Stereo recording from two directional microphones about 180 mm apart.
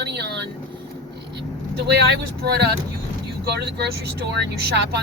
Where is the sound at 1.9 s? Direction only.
65° right (ahead or behind).